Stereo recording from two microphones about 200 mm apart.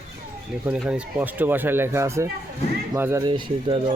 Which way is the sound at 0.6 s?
5° right (ahead or behind).